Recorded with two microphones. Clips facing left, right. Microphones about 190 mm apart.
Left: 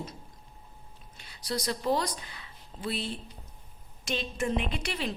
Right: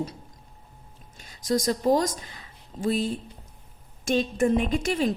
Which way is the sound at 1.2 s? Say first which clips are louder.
Right 9 dB; 45° right (ahead or behind).